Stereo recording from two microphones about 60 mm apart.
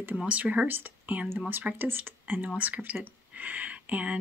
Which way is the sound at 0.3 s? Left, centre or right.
Right.